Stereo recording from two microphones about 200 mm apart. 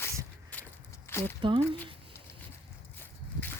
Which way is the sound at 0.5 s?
5° left (ahead or behind).